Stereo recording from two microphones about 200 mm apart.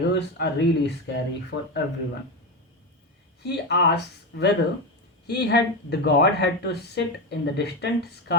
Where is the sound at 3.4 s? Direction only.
55° left (ahead or behind).